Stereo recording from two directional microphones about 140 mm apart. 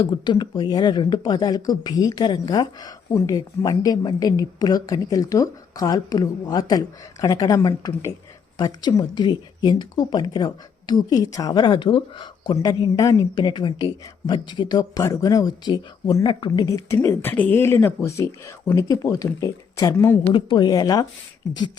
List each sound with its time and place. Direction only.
0.0 s speech: 35° left (ahead or behind); by 20.3 s 20° left (ahead or behind)
20.3 s speech: 35° left (ahead or behind)